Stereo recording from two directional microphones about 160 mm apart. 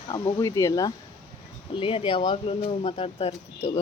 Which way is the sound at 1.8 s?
35° left (ahead or behind).